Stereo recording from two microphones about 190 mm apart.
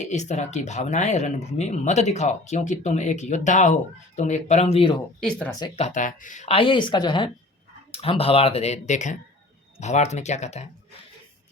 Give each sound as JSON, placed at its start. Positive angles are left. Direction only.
{"t": 0.0, "sound": "speech", "side_deg": 40}
{"t": 5.7, "sound": "speech", "side_deg": 35}